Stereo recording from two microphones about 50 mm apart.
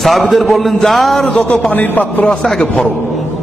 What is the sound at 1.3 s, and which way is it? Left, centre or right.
Speech, left.